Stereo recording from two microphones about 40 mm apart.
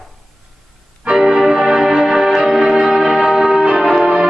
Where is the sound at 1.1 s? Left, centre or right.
Centre.